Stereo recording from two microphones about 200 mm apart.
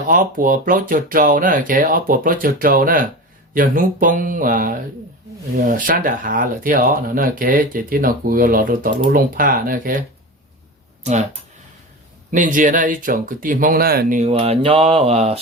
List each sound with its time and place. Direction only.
0.1 s speech: 45° right (ahead or behind)
11.1 s speech: 35° right (ahead or behind)
12.3 s speech: 40° right (ahead or behind)
14.2 s speech: 30° right (ahead or behind)